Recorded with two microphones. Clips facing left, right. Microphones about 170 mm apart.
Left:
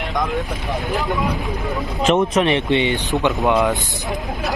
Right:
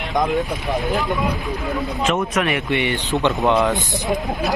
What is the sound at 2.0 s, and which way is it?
Speech, 25° left (ahead or behind).